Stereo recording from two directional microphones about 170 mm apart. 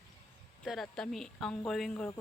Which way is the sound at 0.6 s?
Centre (ahead or behind).